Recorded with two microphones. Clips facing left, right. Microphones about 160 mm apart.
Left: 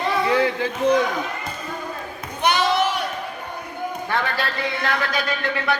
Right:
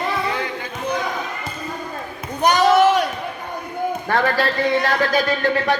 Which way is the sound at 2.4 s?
40° right (ahead or behind).